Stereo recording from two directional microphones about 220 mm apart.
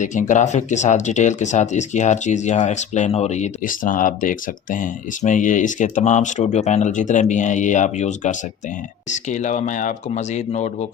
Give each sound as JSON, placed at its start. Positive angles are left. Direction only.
{"t": 0.0, "sound": "speech", "side_deg": 35}